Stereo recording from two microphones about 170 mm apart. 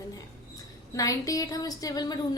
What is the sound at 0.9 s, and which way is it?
A woman's voice, 20° left (ahead or behind).